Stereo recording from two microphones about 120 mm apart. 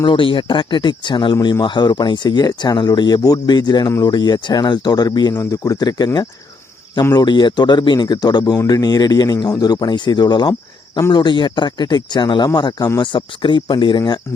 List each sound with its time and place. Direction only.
0.0 s speech: 45° left (ahead or behind)